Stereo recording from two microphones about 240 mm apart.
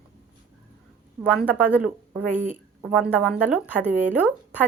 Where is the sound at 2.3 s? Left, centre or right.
Right.